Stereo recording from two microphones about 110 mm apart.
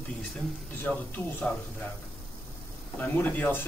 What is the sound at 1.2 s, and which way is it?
Speech, 15° left (ahead or behind).